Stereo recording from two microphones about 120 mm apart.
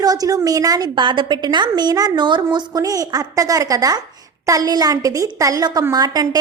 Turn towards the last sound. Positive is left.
turn(degrees=-35)  # may be behind; listen again after turning